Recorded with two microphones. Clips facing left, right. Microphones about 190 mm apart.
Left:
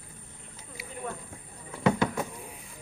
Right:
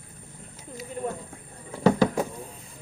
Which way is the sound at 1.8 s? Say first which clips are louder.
Right 5 dB; 35° right (ahead or behind).